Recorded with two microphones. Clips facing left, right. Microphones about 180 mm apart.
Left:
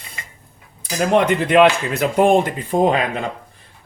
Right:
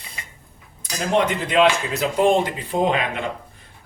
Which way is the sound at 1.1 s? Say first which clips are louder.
Left 4 dB; 60° left (ahead or behind).